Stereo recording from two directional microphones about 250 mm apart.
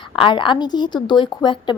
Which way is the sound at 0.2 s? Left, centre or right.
Centre.